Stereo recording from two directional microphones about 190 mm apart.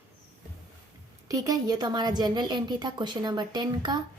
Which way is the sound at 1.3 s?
20° right (ahead or behind).